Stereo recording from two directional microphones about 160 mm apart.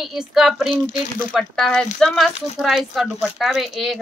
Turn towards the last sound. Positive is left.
turn(degrees=0)  # may be behind; listen again after turning